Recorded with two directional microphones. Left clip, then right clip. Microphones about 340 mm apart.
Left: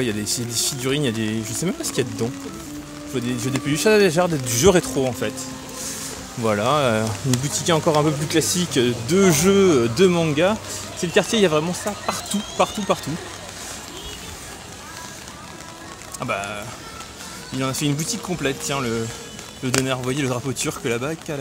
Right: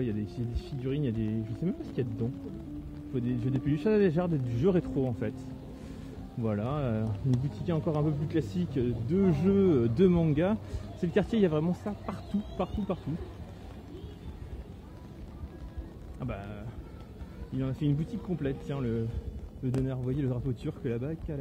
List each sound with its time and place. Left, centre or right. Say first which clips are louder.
0.0 s speech: left 11 dB; centre
3.2 s speech: left 8 dB; centre
6.4 s speech: left 15 dB; centre
16.2 s speech: left 16 dB; centre